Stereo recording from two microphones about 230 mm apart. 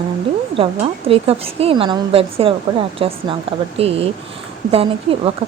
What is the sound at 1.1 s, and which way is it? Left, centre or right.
A woman's voice, right.